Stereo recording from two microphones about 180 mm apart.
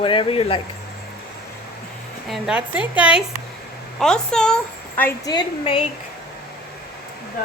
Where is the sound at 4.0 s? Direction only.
5° left (ahead or behind).